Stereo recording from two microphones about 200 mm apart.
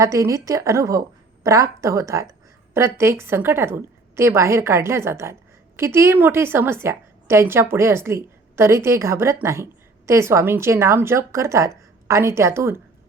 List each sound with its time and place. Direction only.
0.0 s a woman's voice: 15° right (ahead or behind)